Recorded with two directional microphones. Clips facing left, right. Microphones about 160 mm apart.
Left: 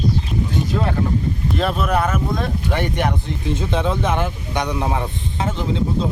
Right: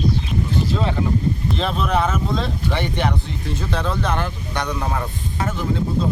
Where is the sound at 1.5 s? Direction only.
5° left (ahead or behind).